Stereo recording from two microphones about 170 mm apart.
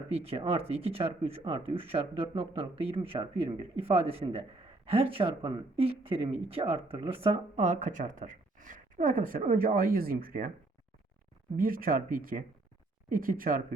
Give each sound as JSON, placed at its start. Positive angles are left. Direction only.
{"t": 0.3, "sound": "speech", "side_deg": -35}
{"t": 11.5, "sound": "speech", "side_deg": -55}